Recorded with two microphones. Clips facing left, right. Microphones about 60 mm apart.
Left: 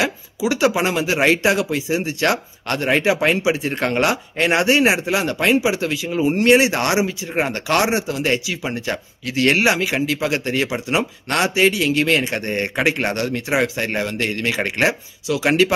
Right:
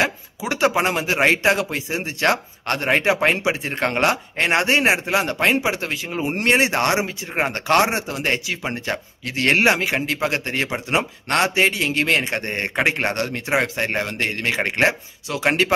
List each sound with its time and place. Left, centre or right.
0.0 s speech: right
1.2 s speech: right
1.5 s speech: right